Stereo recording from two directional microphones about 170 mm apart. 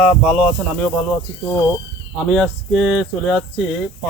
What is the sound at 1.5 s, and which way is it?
Speech, 20° left (ahead or behind).